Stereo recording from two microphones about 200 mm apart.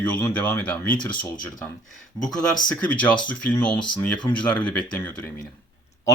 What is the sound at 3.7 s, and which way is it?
Speech, 25° left (ahead or behind).